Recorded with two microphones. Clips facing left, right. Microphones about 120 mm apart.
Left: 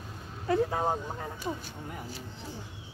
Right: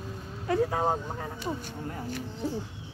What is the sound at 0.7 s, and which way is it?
Speech, 15° right (ahead or behind).